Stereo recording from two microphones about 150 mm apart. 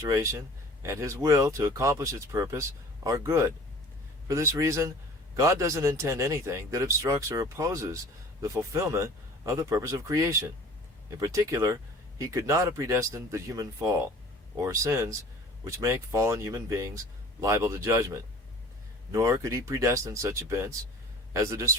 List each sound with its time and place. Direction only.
0.0 s speech: 20° right (ahead or behind)